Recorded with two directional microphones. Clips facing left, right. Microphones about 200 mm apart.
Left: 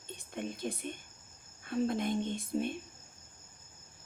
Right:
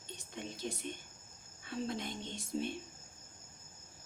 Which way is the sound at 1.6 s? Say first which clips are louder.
Left 7 dB; 50° left (ahead or behind).